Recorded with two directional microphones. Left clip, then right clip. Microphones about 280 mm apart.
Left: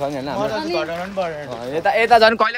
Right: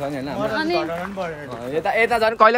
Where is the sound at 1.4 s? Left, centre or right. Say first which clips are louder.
Left 1 dB; centre.